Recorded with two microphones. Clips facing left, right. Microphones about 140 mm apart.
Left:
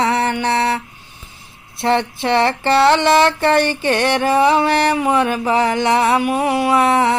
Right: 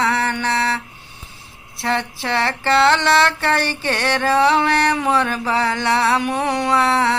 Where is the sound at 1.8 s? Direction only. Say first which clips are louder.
Left 5 dB; 20° left (ahead or behind).